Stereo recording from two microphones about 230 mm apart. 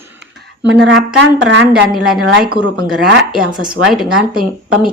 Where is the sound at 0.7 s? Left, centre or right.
Right.